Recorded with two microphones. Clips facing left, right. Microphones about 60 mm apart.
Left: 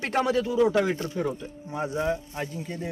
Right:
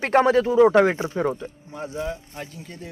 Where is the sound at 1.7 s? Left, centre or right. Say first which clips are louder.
Left 3 dB; left.